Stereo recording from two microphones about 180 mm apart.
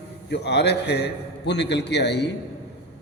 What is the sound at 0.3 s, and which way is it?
A man's voice, 70° left (ahead or behind).